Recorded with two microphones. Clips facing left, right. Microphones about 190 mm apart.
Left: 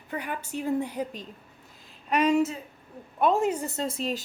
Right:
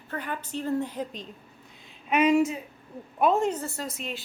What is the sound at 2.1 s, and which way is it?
Speech, 5° right (ahead or behind).